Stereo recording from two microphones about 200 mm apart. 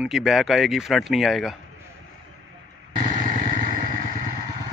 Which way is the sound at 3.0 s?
40° right (ahead or behind).